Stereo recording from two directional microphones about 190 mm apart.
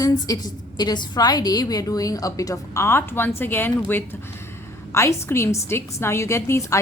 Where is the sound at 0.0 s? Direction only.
20° left (ahead or behind).